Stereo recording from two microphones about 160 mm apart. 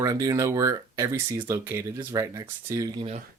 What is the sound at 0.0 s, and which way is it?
Speech, 20° right (ahead or behind).